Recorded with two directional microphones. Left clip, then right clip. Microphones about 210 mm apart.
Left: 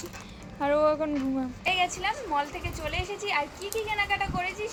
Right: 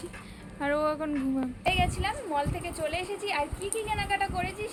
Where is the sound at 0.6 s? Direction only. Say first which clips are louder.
Left 4 dB; 10° right (ahead or behind).